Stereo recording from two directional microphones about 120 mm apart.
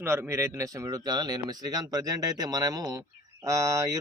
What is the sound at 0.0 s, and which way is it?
Speech, 20° right (ahead or behind).